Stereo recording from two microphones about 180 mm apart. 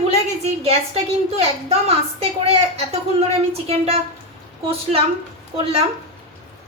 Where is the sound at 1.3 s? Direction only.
35° right (ahead or behind).